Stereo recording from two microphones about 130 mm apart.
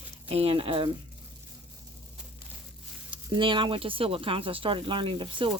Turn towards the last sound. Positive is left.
turn(degrees=-40)  # may be behind; listen again after turning